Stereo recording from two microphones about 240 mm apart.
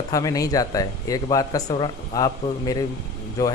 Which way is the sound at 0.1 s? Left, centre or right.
Centre.